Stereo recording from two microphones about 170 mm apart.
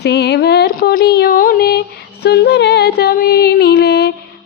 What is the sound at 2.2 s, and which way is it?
Music, 75° left (ahead or behind).